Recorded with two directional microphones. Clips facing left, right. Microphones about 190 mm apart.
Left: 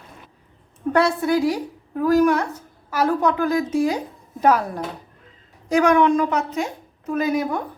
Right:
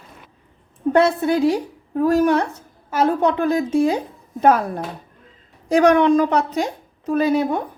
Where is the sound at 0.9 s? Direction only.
25° right (ahead or behind).